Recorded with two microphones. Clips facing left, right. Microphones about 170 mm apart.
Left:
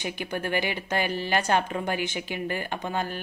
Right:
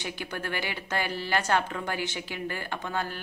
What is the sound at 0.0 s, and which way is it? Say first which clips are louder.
A woman's voice: left 4 dB; 15° left (ahead or behind).